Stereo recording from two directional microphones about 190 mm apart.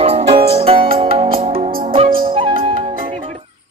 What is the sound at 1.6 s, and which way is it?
Music, 50° right (ahead or behind).